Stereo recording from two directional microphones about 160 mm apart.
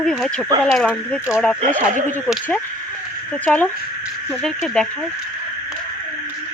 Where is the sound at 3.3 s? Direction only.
10° left (ahead or behind).